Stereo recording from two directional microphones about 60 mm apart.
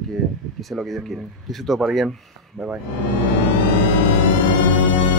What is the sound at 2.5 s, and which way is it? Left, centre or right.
Speech, right.